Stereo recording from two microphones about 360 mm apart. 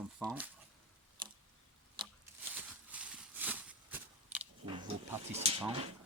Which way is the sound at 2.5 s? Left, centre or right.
Centre.